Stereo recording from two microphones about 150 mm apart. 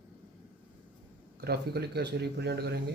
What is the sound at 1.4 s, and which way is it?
Speech, 90° right.